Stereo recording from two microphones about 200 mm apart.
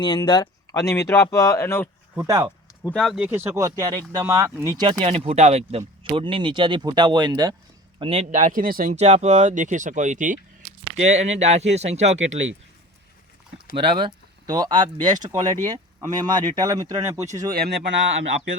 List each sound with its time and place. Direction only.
0.0 s speech: 20° left (ahead or behind)
2.1 s speech: 15° right (ahead or behind)
2.8 s speech: centre (ahead or behind); by 4.9 s 20° right (ahead or behind)
5.0 s speech: 30° right (ahead or behind)
13.9 s speech: 20° right (ahead or behind)
17.5 s speech: 55° right (ahead or behind)